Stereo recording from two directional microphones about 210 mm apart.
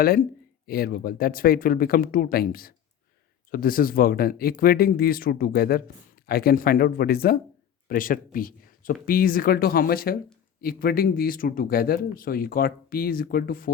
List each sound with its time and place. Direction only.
0.0 s speech: 45° left (ahead or behind)